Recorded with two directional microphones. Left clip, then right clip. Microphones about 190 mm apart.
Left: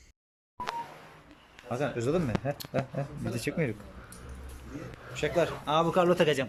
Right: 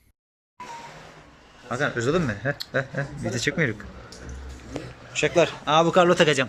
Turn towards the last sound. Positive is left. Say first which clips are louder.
# right 7 dB
turn(degrees=0)  # may be behind; listen again after turning